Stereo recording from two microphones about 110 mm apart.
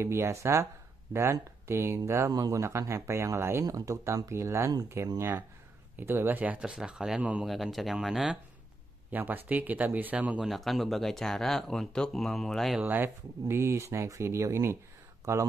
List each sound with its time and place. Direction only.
0.0 s speech: 25° right (ahead or behind)
7.4 s speech: centre (ahead or behind)
9.1 s speech: 15° right (ahead or behind)
10.5 s speech: centre (ahead or behind)
12.7 s speech: 15° right (ahead or behind)